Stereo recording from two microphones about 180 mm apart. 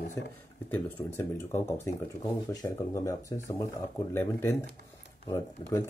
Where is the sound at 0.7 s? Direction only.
10° left (ahead or behind).